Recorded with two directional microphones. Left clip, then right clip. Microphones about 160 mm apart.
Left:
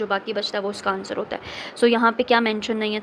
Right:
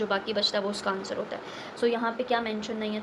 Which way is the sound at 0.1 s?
40° left (ahead or behind).